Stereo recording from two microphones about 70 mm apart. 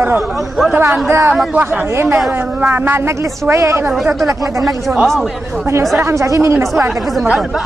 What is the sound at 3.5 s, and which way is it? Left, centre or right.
Speech, right.